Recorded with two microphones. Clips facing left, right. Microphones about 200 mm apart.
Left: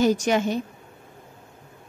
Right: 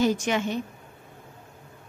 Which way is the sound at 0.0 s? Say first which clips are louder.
Left 3 dB; 40° left (ahead or behind).